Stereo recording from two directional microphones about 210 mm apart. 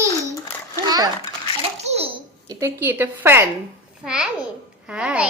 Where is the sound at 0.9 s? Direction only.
20° right (ahead or behind).